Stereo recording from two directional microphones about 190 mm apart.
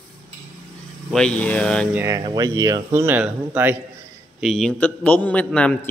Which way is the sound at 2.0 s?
20° right (ahead or behind).